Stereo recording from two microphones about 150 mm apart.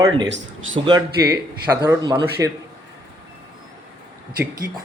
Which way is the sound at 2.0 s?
25° right (ahead or behind).